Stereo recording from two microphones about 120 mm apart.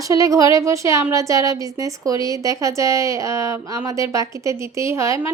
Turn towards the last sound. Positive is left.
turn(degrees=-25)  # may be behind; listen again after turning